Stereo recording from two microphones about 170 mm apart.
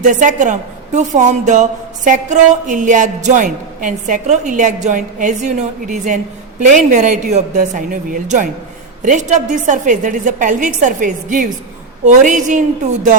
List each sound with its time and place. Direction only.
0.0 s a woman's voice: 50° right (ahead or behind)